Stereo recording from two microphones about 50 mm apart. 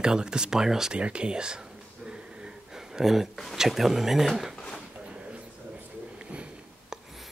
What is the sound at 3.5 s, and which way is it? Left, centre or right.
Speech, centre.